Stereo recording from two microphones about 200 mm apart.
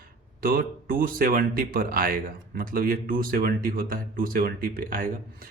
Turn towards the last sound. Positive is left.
turn(degrees=-45)  # may be behind; listen again after turning